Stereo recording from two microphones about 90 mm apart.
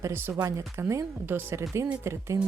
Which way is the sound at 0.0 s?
25° right (ahead or behind).